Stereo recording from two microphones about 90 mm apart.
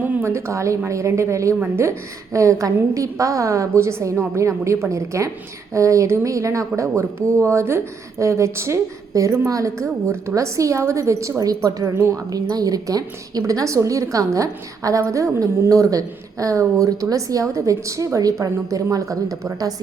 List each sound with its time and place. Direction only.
0.0 s a sound: 20° right (ahead or behind)
0.3 s a woman's voice: 30° right (ahead or behind)
11.9 s speech: 30° right (ahead or behind)
12.3 s a woman's voice: 45° right (ahead or behind)